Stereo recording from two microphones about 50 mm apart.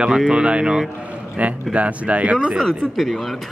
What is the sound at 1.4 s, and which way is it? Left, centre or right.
A man's voice, right.